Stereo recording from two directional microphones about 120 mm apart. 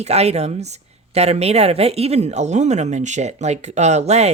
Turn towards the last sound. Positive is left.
turn(degrees=-65)  # may be behind; listen again after turning